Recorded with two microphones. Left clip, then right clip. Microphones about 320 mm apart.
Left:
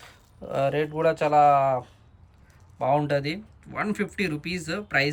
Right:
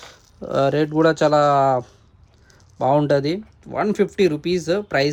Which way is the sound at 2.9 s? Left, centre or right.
Centre.